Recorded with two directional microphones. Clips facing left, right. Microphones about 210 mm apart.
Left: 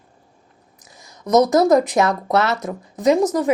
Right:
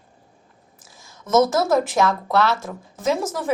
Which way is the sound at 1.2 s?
15° left (ahead or behind).